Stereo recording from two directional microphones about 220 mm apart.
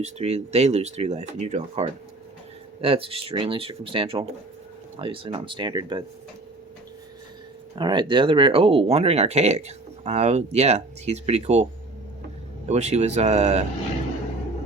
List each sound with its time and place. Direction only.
0.0 s speech: 30° right (ahead or behind)
7.8 s speech: 20° right (ahead or behind)